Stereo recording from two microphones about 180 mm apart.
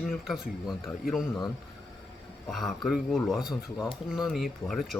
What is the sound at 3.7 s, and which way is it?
Speech, 20° left (ahead or behind).